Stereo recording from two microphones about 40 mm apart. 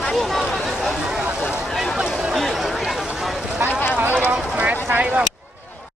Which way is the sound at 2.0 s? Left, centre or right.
Centre.